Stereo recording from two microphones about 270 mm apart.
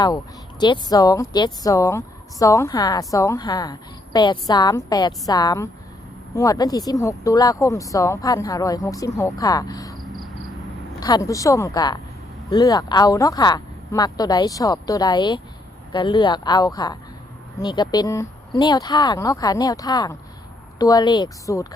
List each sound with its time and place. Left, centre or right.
0.6 s a woman's voice: centre
10.0 s cricket: centre
11.0 s a woman's voice: centre